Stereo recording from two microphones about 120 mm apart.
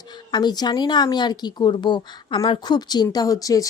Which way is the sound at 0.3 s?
35° left (ahead or behind).